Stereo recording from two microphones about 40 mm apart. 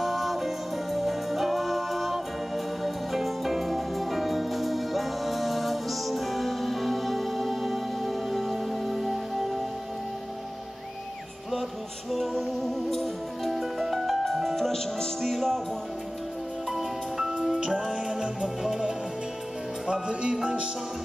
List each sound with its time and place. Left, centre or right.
0.0 s music: centre
12.1 s music: centre
17.9 s music: centre
19.9 s music: right